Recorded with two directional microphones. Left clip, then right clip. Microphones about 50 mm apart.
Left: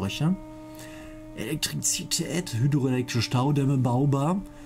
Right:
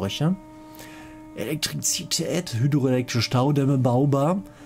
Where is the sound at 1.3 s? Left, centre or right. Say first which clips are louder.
Right 3 dB; right.